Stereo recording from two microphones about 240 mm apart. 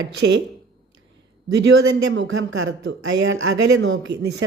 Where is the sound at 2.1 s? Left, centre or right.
Right.